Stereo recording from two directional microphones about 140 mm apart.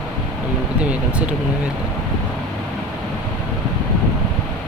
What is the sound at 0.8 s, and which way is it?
Speech, 10° right (ahead or behind).